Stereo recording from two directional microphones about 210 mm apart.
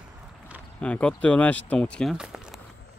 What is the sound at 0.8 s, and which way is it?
Speech, 5° left (ahead or behind).